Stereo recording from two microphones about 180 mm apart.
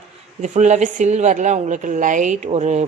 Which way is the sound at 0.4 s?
40° right (ahead or behind).